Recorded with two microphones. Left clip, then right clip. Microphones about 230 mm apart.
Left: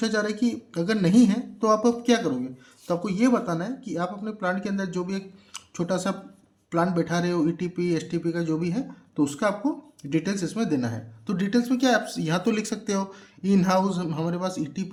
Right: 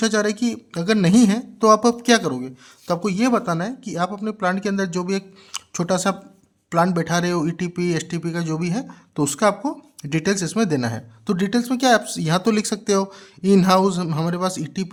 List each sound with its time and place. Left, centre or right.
0.0 s speech: right